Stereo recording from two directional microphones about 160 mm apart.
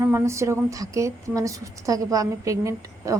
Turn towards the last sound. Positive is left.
turn(degrees=-20)  # may be behind; listen again after turning